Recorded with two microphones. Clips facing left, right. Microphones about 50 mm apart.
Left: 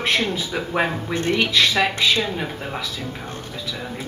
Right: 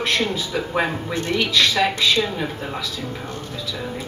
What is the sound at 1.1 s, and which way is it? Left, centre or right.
Speech, left.